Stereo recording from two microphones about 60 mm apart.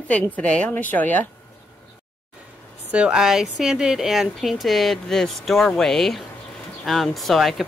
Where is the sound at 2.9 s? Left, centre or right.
Centre.